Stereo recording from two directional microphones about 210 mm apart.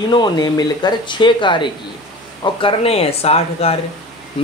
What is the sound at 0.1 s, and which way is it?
Speech, 20° left (ahead or behind).